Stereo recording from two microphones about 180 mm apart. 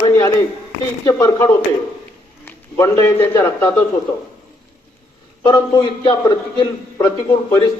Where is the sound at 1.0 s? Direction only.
20° left (ahead or behind).